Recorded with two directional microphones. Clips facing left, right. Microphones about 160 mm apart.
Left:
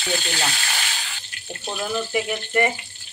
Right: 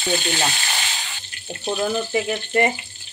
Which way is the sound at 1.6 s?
30° right (ahead or behind).